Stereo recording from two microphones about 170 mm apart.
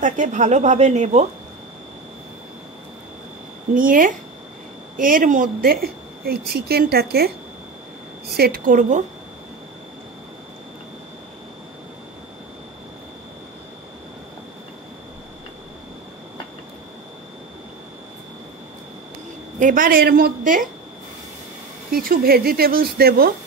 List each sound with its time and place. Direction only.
0.0 s speech: 45° right (ahead or behind)
3.7 s a woman's voice: 55° right (ahead or behind)
8.4 s a woman's voice: 60° right (ahead or behind)
19.6 s a woman's voice: 50° right (ahead or behind)
21.9 s a woman's voice: 60° right (ahead or behind)